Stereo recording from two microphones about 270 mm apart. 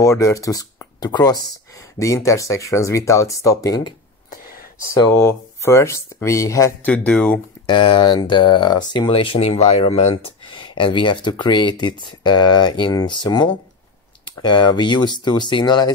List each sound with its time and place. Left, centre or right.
0.0 s speech: centre
7.6 s speech: centre